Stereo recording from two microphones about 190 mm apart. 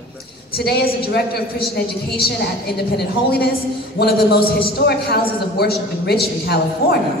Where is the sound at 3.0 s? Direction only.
55° left (ahead or behind).